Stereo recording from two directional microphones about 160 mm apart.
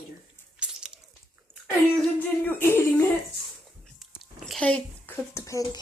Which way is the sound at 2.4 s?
10° left (ahead or behind).